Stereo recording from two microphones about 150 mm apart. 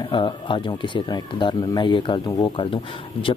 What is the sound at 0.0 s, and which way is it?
Speech, 35° left (ahead or behind).